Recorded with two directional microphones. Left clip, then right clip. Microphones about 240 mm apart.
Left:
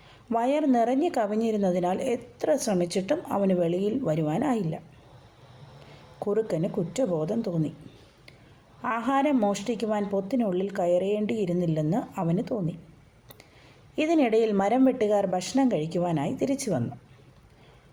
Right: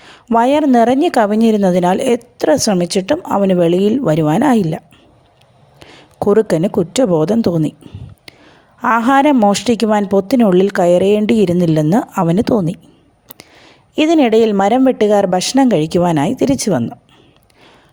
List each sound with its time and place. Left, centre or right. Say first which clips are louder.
0.0 s a woman's voice: right 14 dB; right
5.8 s speech: right 15 dB; right
8.8 s a woman's voice: right 14 dB; right